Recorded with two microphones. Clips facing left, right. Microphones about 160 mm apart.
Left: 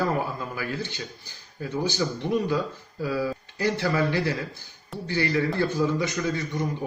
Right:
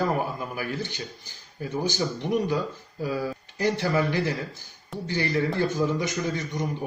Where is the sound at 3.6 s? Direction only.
15° right (ahead or behind).